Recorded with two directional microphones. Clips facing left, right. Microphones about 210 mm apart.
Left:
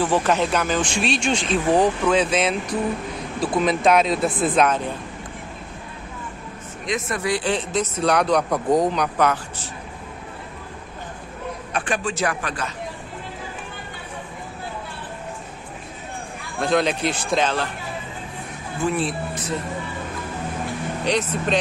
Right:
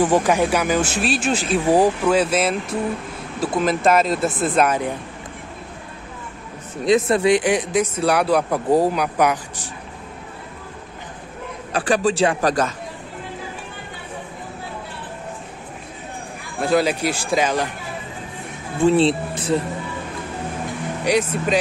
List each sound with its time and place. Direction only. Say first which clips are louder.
0.0 s speech: right 3 dB; 15° right (ahead or behind)
6.8 s speech: right 9 dB; 30° right (ahead or behind); by 9.7 s 15° right (ahead or behind)
11.7 s a man's voice: right 7 dB; 35° right (ahead or behind)
16.5 s speech: right 2 dB; 5° right (ahead or behind)
18.8 s speech: right 8 dB; 30° right (ahead or behind)
21.0 s speech: right 4 dB; 10° right (ahead or behind)